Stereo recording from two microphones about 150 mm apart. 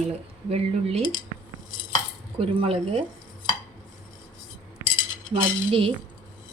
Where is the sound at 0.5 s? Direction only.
45° right (ahead or behind).